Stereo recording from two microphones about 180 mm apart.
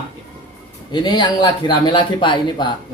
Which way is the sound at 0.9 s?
25° left (ahead or behind).